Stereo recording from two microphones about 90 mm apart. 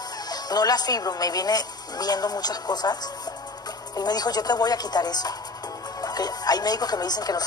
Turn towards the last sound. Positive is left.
turn(degrees=45)  # may be behind; listen again after turning